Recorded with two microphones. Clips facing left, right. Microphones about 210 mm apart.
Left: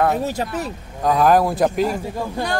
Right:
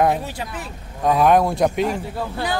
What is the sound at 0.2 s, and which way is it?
Speech, 40° left (ahead or behind).